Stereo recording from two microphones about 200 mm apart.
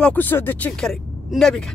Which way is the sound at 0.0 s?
10° left (ahead or behind).